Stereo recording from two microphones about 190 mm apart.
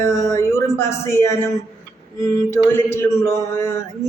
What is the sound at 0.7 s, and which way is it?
A woman's voice, 15° left (ahead or behind).